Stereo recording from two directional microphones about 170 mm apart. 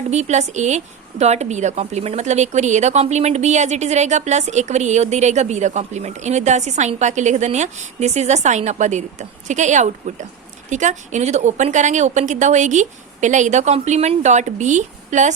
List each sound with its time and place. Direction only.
0.1 s a woman's voice: 40° right (ahead or behind)